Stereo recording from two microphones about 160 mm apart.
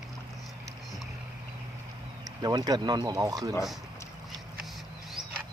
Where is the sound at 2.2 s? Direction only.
25° right (ahead or behind).